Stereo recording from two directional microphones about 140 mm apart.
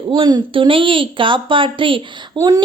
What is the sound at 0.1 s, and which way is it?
A woman's voice, 30° right (ahead or behind).